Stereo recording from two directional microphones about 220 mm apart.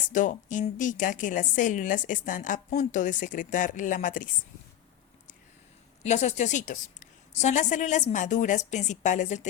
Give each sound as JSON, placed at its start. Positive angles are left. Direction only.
{"t": 0.1, "sound": "a woman's voice", "side_deg": 35}
{"t": 6.0, "sound": "a woman's voice", "side_deg": 30}